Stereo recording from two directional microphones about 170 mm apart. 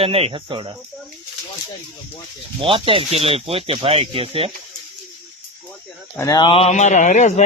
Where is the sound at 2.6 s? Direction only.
30° right (ahead or behind).